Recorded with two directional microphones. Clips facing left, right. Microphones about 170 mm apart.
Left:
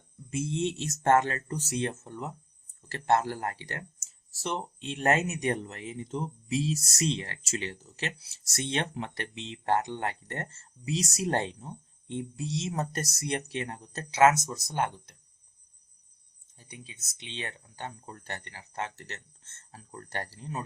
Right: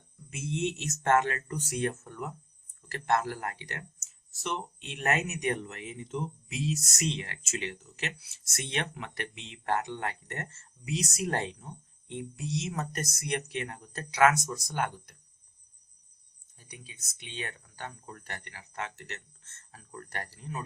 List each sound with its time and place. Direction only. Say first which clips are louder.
0.3 s speech: left 2 dB; 30° left (ahead or behind)
16.6 s speech: left 2 dB; 25° left (ahead or behind)